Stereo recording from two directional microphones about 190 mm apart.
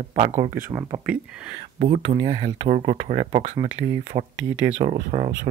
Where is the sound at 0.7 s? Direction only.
25° right (ahead or behind).